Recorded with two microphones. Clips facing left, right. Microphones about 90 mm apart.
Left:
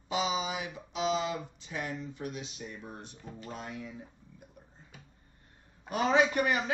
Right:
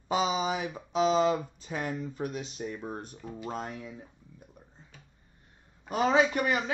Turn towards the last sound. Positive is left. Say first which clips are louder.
# even
turn(degrees=-30)  # may be behind; listen again after turning